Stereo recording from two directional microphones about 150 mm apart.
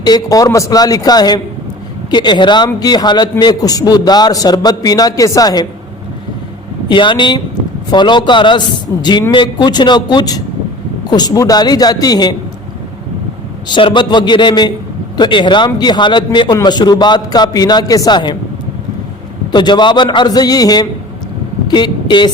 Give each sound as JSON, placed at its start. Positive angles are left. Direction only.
{"t": 0.0, "sound": "a man's voice", "side_deg": 25}
{"t": 6.8, "sound": "a man's voice", "side_deg": 30}
{"t": 13.7, "sound": "a man's voice", "side_deg": 30}
{"t": 19.5, "sound": "a man's voice", "side_deg": 30}